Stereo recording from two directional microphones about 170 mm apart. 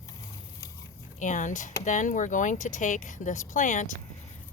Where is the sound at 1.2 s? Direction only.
45° left (ahead or behind).